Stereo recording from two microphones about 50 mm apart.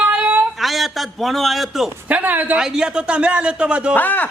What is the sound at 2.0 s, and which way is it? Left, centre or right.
Speech, right.